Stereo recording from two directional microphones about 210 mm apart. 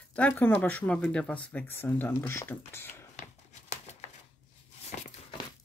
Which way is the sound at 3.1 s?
35° left (ahead or behind).